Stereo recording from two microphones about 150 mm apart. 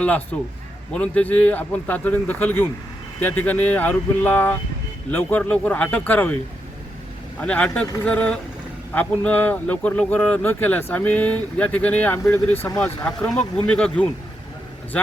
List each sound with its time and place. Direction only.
0.0 s speech: 10° left (ahead or behind)
7.3 s speech: 10° left (ahead or behind)
13.1 s speech: 5° left (ahead or behind)